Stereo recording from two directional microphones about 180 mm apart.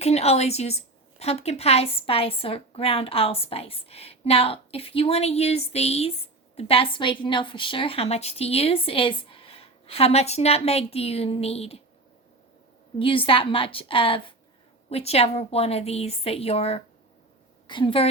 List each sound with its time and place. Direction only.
0.0 s a woman's voice: 35° left (ahead or behind)
13.0 s a woman's voice: 30° left (ahead or behind)